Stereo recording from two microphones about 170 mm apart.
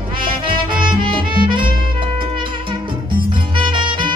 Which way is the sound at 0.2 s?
30° right (ahead or behind).